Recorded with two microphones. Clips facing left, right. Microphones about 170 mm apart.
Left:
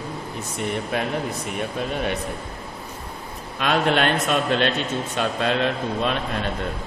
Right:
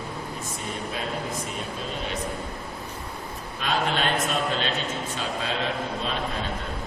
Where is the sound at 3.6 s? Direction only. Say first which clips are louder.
Left 6 dB; 70° left (ahead or behind).